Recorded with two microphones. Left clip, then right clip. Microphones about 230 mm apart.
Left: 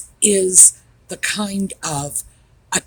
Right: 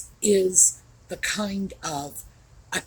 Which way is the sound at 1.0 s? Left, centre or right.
Left.